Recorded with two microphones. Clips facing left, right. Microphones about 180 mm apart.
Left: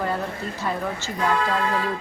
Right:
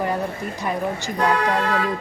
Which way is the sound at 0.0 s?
15° right (ahead or behind).